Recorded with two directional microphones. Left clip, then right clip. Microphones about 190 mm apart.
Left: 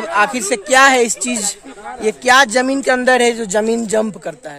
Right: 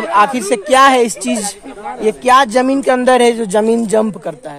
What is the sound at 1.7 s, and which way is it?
Speech, 35° right (ahead or behind).